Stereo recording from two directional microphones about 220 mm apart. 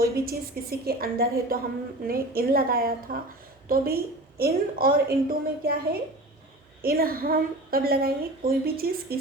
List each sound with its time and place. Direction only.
0.0 s a woman's voice: 45° right (ahead or behind)